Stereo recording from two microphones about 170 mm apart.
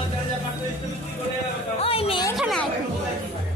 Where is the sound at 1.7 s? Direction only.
35° left (ahead or behind).